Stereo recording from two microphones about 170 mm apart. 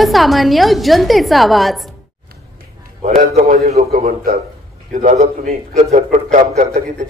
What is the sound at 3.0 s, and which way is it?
A man's voice, 40° right (ahead or behind).